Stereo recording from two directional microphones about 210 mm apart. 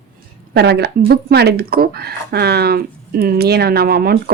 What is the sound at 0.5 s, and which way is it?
Speech, 50° right (ahead or behind).